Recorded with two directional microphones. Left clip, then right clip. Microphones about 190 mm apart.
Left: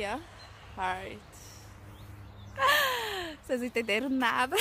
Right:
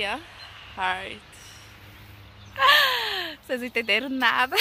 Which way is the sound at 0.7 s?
15° right (ahead or behind).